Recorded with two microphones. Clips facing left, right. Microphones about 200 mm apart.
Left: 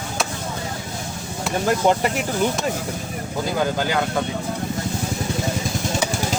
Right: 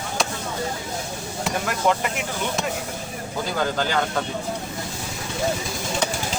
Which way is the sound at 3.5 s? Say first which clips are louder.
Left 1 dB; 10° left (ahead or behind).